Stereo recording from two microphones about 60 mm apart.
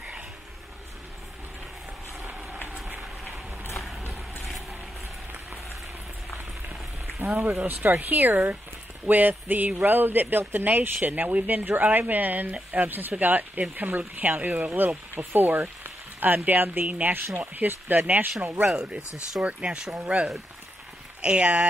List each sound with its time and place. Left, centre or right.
4.5 s vehicle: centre
7.3 s speech: right
18.7 s speech: centre